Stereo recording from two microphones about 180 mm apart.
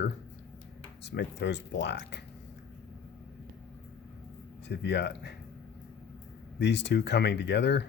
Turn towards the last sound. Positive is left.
turn(degrees=75)  # may be behind; listen again after turning